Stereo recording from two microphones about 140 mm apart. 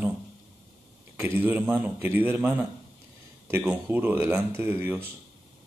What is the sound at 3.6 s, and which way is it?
Speech, 15° right (ahead or behind).